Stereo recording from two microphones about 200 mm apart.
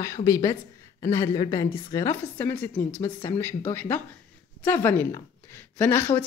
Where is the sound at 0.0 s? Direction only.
15° left (ahead or behind).